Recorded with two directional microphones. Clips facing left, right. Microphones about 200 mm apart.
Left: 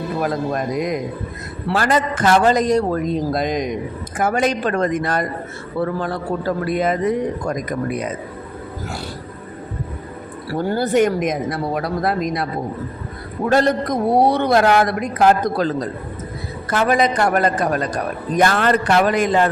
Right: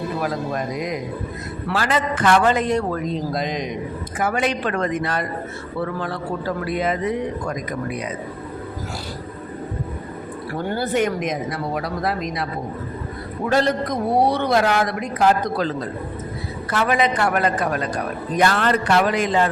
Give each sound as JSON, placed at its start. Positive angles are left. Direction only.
{"t": 0.2, "sound": "a man's voice", "side_deg": 50}
{"t": 3.3, "sound": "a man's voice", "side_deg": 50}
{"t": 6.7, "sound": "a man's voice", "side_deg": 45}
{"t": 10.5, "sound": "a man's voice", "side_deg": 45}
{"t": 13.5, "sound": "a man's voice", "side_deg": 50}